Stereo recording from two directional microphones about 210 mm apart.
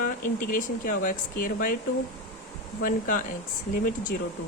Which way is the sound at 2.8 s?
40° left (ahead or behind).